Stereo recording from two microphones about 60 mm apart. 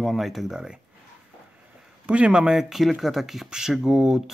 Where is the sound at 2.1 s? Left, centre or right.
Centre.